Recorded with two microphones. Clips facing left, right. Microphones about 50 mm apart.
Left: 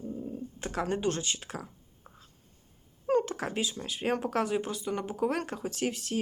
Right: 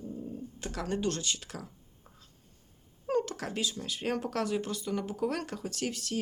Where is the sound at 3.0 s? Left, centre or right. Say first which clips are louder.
Left 3 dB; left.